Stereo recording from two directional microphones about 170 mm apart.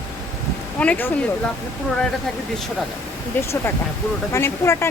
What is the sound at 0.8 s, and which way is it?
Speech, 10° left (ahead or behind).